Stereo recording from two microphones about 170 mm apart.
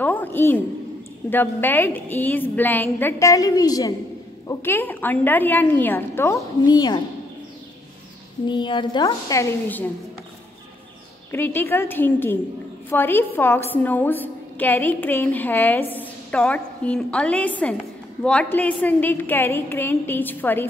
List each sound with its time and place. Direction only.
0.0 s a woman's voice: 10° left (ahead or behind)
8.5 s a woman's voice: 25° left (ahead or behind)
11.3 s a woman's voice: 15° left (ahead or behind)